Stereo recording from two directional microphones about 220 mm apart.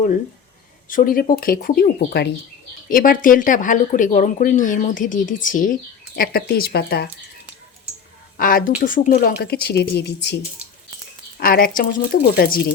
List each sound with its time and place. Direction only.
0.9 s a woman's voice: 40° left (ahead or behind)
8.4 s a woman's voice: 40° left (ahead or behind)
11.3 s speech: 45° left (ahead or behind)